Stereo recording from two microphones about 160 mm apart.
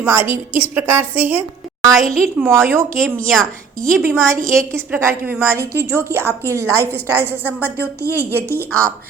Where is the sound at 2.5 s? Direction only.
15° right (ahead or behind).